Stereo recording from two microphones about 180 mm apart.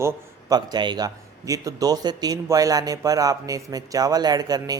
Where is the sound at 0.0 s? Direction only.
15° right (ahead or behind).